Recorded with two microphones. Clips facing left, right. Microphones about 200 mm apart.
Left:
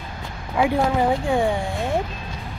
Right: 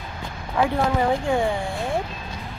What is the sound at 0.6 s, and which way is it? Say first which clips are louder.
Speech: left 2 dB; 10° left (ahead or behind).